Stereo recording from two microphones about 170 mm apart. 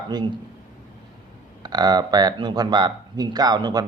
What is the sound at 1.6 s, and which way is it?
A man's voice, 25° right (ahead or behind).